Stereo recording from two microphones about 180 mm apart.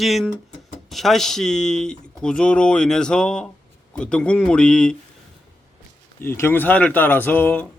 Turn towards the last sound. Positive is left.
turn(degrees=10)  # may be behind; listen again after turning